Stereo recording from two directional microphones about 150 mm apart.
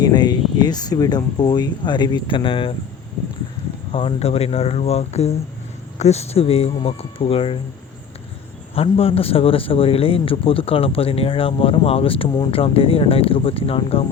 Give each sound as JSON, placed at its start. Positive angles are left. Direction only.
{"t": 0.0, "sound": "speech", "side_deg": 25}
{"t": 3.9, "sound": "a man's voice", "side_deg": 40}
{"t": 8.7, "sound": "a man's voice", "side_deg": 40}